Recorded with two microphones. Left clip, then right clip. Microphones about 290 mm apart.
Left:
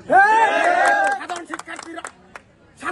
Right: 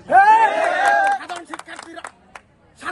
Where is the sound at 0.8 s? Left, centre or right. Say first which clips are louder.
Right 1 dB; right.